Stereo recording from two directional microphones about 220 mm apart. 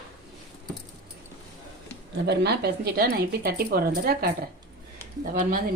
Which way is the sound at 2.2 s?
50° right (ahead or behind).